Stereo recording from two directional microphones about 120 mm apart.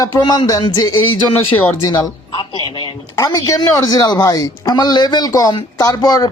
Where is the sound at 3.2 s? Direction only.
30° left (ahead or behind).